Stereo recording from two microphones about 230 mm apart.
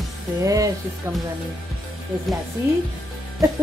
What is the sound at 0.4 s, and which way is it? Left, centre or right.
Speech, centre.